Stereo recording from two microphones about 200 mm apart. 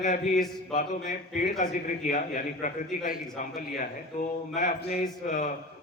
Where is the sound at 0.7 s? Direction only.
40° left (ahead or behind).